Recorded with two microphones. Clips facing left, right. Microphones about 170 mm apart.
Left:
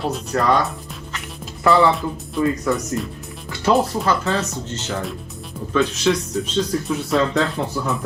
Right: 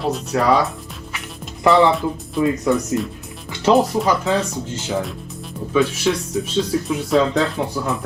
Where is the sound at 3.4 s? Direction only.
20° right (ahead or behind).